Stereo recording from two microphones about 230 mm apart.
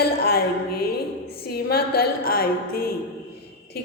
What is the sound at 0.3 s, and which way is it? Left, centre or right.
Music, left.